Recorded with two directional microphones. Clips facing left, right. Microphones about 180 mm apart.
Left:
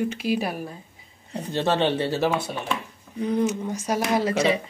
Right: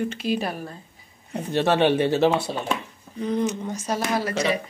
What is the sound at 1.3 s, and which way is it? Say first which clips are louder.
Speech: right 2 dB; 15° right (ahead or behind).